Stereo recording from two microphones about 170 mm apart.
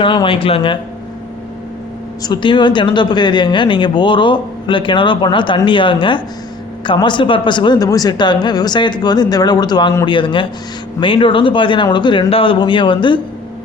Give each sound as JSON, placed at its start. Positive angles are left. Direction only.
{"t": 0.0, "sound": "speech", "side_deg": 30}
{"t": 2.2, "sound": "speech", "side_deg": 25}